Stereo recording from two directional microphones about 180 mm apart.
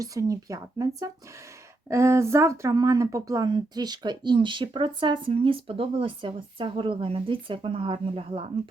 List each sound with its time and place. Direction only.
0.0 s speech: 20° right (ahead or behind)